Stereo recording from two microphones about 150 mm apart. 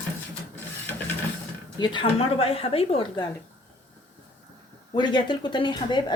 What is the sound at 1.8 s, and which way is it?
A woman's voice, 35° left (ahead or behind).